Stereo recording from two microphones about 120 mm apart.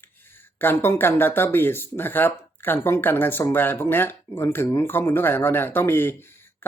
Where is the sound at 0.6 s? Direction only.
20° left (ahead or behind).